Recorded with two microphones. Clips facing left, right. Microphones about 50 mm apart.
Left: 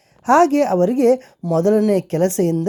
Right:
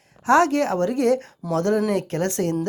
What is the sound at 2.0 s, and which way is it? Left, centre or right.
Speech, left.